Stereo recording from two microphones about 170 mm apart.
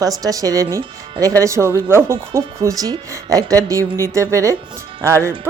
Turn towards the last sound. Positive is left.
turn(degrees=-15)  # may be behind; listen again after turning